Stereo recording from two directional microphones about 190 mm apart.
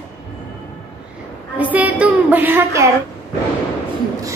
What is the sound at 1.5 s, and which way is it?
A woman's voice, 10° right (ahead or behind).